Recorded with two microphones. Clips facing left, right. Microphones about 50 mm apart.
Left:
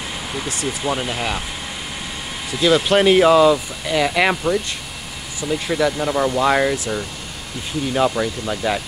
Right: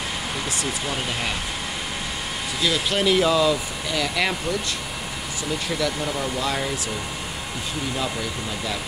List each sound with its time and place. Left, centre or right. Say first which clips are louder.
0.7 s speech: left 4 dB; centre
2.6 s speech: left 8 dB; left
5.7 s speech: left 7 dB; centre
6.1 s speech: left 8 dB; left
7.9 s speech: left 12 dB; left